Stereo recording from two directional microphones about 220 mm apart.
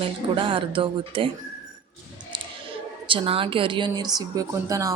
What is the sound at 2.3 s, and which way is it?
Speech, 25° right (ahead or behind).